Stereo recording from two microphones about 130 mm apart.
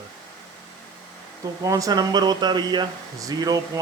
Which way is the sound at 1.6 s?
25° right (ahead or behind).